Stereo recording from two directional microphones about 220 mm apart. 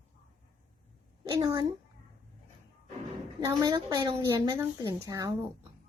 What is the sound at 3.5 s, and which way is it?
A woman's voice, 15° right (ahead or behind).